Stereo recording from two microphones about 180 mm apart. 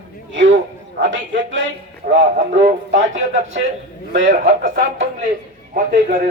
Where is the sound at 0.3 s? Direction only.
85° right.